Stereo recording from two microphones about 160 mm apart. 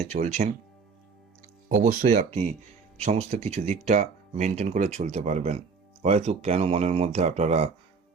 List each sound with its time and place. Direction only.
0.1 s speech: 45° right (ahead or behind)
1.7 s speech: 50° right (ahead or behind)